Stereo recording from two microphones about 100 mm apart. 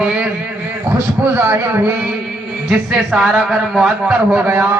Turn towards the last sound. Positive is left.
turn(degrees=-15)  # may be behind; listen again after turning